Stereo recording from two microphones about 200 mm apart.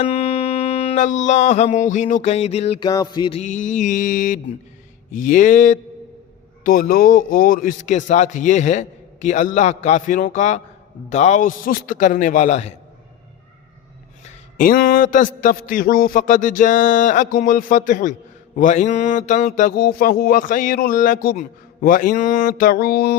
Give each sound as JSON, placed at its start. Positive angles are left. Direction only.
{"t": 0.0, "sound": "a sound", "side_deg": 30}
{"t": 1.2, "sound": "a man's voice", "side_deg": 35}
{"t": 2.9, "sound": "music", "side_deg": 20}
{"t": 3.4, "sound": "a man's voice", "side_deg": 40}
{"t": 14.6, "sound": "a man's voice", "side_deg": 45}